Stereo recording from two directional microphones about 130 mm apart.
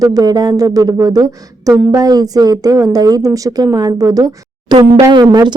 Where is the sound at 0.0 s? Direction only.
30° right (ahead or behind).